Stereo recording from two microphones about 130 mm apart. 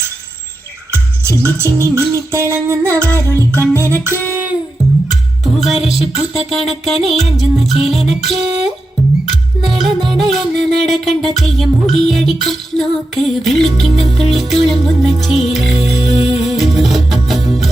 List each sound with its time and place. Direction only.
0.9 s music: 20° right (ahead or behind)
5.5 s music: centre (ahead or behind)
9.6 s music: centre (ahead or behind)